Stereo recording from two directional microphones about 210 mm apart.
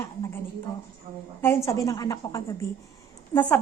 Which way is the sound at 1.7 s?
15° left (ahead or behind).